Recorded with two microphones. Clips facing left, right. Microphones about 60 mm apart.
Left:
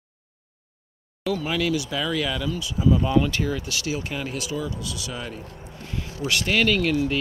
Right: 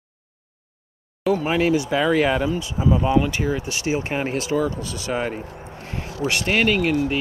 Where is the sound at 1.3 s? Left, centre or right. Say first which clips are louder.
Right 5 dB; right.